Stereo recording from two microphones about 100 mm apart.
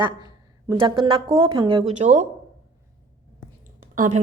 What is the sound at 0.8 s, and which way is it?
Speech, 60° right (ahead or behind).